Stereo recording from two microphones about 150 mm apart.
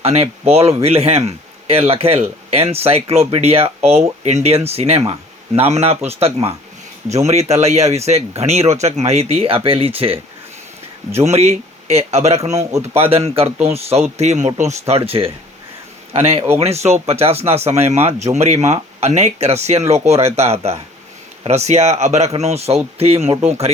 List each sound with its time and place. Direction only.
0.0 s speech: 45° right (ahead or behind)
11.2 s speech: 45° right (ahead or behind)
12.7 s speech: 15° right (ahead or behind)
13.0 s speech: 40° right (ahead or behind)